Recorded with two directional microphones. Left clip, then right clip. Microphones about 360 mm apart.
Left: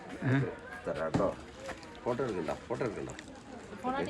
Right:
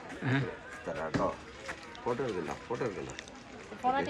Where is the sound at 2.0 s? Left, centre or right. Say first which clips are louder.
Left 1 dB; centre.